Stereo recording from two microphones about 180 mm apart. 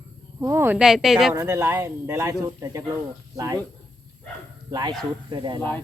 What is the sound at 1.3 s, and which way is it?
Speech, 15° right (ahead or behind).